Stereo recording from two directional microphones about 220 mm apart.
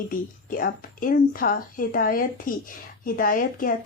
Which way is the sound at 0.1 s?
40° left (ahead or behind).